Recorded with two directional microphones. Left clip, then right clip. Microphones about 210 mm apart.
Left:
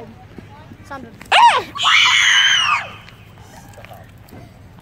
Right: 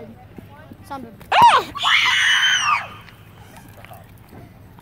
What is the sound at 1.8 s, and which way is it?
Speech, 15° left (ahead or behind).